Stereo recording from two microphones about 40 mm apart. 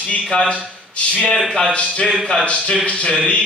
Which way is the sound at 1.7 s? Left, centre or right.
Left.